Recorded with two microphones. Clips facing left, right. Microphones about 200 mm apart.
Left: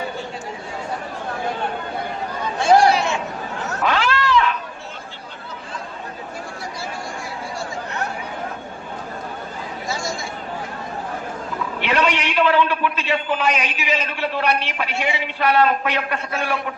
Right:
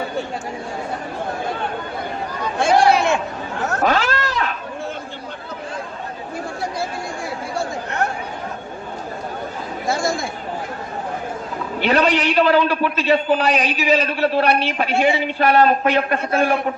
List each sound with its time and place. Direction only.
2.6 s chatter: 55° right (ahead or behind)
3.7 s cat: 45° right (ahead or behind)
9.8 s chatter: 55° right (ahead or behind)
11.8 s a man's voice: 35° right (ahead or behind)